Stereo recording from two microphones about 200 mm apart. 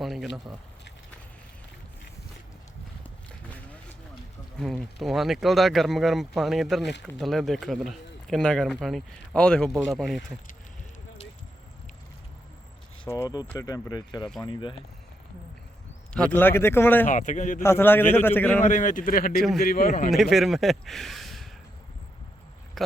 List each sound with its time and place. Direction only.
0.0 s speech: centre (ahead or behind)
4.5 s speech: centre (ahead or behind)
13.1 s speech: 15° left (ahead or behind)
16.1 s a man's voice: 10° left (ahead or behind)
17.1 s speech: 40° left (ahead or behind)
17.6 s a man's voice: 10° left (ahead or behind)
18.6 s a man's voice: 40° left (ahead or behind)
20.1 s a man's voice: centre (ahead or behind)